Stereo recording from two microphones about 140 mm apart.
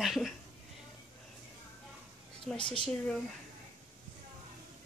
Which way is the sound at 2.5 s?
35° left (ahead or behind).